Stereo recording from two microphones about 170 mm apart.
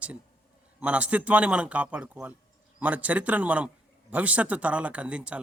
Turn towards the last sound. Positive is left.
turn(degrees=-5)  # may be behind; listen again after turning